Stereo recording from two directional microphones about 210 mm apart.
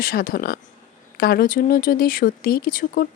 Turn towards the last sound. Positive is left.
turn(degrees=45)  # may be behind; listen again after turning